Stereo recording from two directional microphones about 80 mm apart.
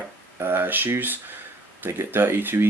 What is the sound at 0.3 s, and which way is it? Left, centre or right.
Speech, right.